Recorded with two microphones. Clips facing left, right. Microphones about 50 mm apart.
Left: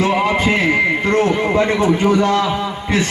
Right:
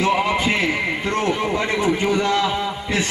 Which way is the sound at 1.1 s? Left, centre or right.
Left.